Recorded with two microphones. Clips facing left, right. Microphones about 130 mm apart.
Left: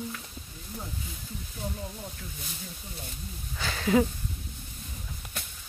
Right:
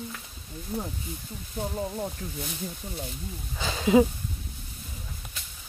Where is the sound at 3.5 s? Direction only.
20° right (ahead or behind).